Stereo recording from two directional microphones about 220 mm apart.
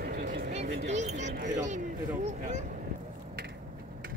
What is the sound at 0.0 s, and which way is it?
Vehicle, 45° right (ahead or behind).